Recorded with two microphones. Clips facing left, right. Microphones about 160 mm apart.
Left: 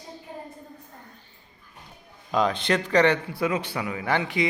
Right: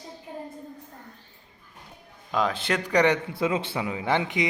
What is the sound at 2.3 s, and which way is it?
A man's voice, centre (ahead or behind).